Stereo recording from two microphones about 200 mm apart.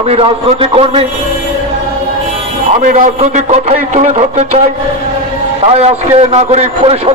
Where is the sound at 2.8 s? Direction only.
35° right (ahead or behind).